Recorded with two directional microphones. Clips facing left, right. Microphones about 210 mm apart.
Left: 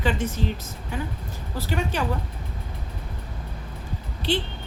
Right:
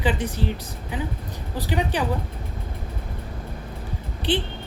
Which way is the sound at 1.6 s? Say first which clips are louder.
Right 2 dB; 15° right (ahead or behind).